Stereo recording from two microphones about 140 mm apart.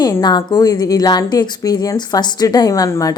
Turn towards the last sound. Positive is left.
turn(degrees=25)  # may be behind; listen again after turning